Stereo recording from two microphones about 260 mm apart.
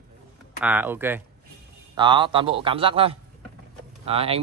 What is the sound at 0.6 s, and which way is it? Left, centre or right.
A man's voice, centre.